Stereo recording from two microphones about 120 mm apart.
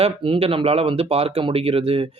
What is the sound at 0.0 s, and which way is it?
Speech, 50° right (ahead or behind).